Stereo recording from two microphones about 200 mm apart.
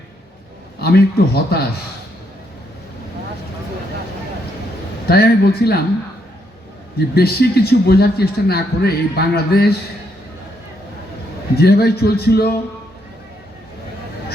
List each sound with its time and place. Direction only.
0.8 s speech: 50° left (ahead or behind)
5.0 s speech: 50° left (ahead or behind)
7.2 s speech: 50° left (ahead or behind)
11.5 s speech: 55° left (ahead or behind)